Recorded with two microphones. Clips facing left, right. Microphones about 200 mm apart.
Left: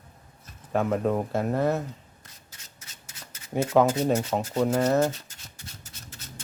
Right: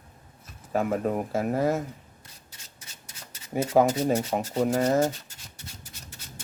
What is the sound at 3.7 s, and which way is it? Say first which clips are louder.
Speech: even; 25° right (ahead or behind).